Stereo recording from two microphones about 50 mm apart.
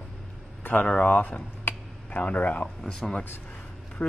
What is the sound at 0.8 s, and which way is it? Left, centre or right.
Speech, left.